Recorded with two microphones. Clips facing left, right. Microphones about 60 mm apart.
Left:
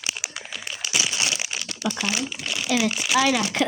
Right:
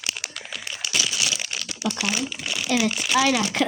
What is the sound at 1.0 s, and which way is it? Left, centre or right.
Crumpling, left.